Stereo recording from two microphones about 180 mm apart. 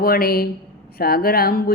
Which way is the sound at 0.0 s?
55° left (ahead or behind).